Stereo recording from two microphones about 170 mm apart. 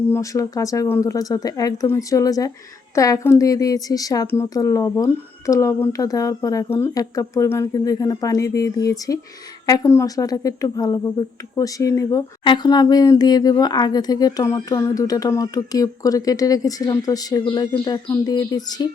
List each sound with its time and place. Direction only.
0.1 s speech: 20° left (ahead or behind)